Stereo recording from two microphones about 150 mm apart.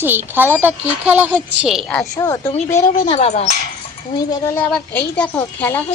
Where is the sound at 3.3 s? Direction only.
50° left (ahead or behind).